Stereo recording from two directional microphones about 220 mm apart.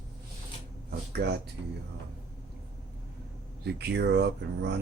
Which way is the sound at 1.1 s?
50° right (ahead or behind).